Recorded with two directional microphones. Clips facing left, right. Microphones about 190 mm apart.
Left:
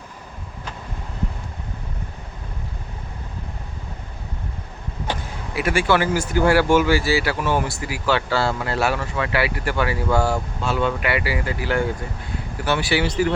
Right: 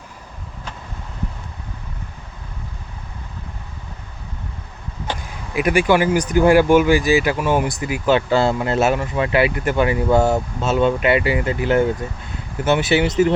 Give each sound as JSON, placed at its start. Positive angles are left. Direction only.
{"t": 5.5, "sound": "speech", "side_deg": -15}